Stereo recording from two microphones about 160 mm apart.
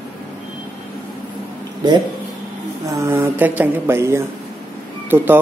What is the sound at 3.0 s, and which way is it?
Speech, 15° right (ahead or behind).